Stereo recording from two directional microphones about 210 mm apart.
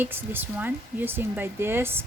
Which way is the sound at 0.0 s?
10° right (ahead or behind).